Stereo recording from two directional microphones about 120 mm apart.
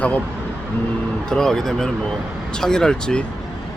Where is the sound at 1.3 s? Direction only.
5° left (ahead or behind).